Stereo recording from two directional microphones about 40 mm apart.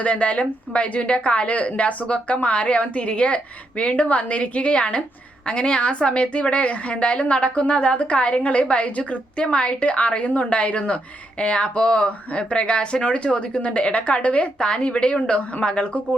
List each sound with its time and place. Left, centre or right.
0.0 s a woman's voice: left
14.6 s a woman's voice: left